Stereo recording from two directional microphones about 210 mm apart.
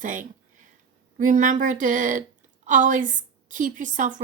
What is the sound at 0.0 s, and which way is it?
A woman's voice, 40° right (ahead or behind).